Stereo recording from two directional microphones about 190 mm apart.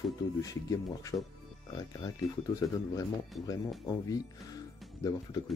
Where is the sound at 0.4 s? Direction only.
20° left (ahead or behind).